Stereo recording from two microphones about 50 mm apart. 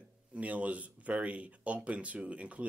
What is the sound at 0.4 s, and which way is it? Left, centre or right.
Speech, right.